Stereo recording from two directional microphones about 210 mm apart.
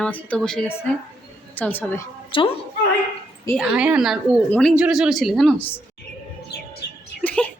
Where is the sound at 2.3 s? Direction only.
25° left (ahead or behind).